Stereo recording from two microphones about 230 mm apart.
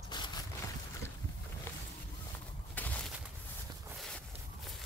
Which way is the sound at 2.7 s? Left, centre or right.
Centre.